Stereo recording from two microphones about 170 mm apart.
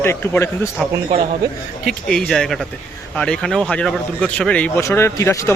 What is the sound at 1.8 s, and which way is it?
A man's voice, centre (ahead or behind).